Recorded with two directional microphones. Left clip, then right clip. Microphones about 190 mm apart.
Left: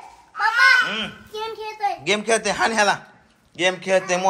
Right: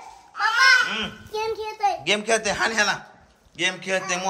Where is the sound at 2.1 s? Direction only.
10° right (ahead or behind).